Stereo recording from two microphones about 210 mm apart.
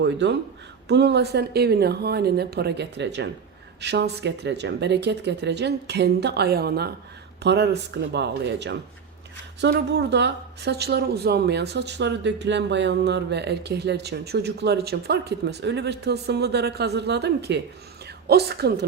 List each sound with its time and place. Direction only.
0.0 s speech: 55° right (ahead or behind)